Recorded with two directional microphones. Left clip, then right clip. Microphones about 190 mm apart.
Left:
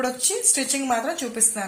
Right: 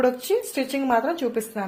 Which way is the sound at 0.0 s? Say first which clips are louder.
Right 3 dB; 60° right (ahead or behind).